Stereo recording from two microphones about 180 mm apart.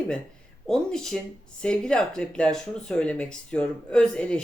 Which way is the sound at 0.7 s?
5° left (ahead or behind).